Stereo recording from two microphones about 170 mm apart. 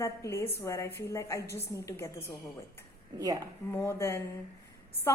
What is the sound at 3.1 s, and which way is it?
Speech, 20° right (ahead or behind).